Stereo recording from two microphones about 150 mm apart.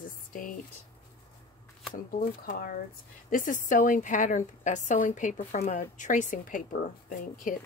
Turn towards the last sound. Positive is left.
turn(degrees=65)  # may be behind; listen again after turning